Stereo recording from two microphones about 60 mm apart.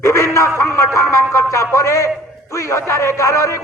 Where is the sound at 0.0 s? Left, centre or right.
Left.